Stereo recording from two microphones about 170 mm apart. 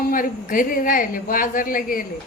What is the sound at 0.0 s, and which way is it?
Speech, 55° left (ahead or behind).